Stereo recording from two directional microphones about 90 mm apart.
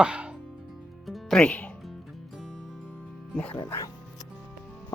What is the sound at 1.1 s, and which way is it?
Speech, centre (ahead or behind).